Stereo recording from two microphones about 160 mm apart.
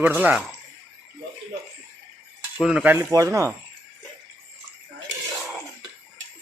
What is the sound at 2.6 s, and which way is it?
Speech, 5° right (ahead or behind).